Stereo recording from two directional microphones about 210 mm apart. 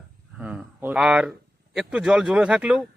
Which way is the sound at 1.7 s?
5° right (ahead or behind).